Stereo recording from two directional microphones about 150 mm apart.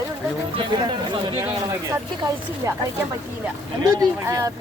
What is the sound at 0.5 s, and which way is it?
Speech, 30° right (ahead or behind).